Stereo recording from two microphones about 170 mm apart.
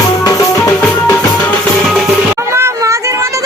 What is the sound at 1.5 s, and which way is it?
Music, centre (ahead or behind).